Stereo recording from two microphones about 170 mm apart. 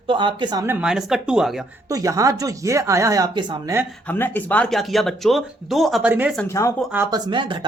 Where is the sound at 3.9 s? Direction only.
10° left (ahead or behind).